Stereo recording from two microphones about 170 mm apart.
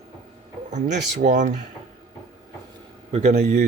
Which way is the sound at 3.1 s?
35° right (ahead or behind).